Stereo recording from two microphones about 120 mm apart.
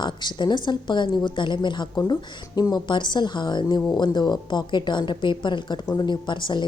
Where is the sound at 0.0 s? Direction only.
40° left (ahead or behind).